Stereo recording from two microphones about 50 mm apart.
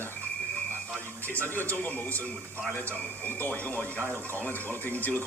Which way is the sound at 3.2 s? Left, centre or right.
Left.